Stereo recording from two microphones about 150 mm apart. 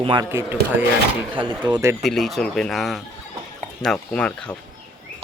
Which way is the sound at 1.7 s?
30° right (ahead or behind).